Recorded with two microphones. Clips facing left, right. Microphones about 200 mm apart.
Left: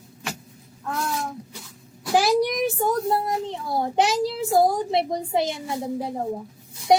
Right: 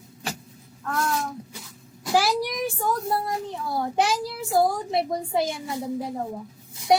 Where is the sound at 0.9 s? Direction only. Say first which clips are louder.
Right 1 dB; 10° left (ahead or behind).